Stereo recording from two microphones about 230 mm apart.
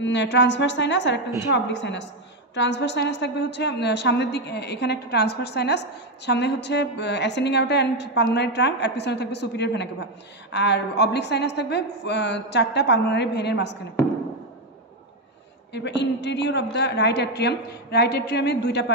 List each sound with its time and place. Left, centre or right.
0.0 s a woman's voice: left
15.7 s a woman's voice: left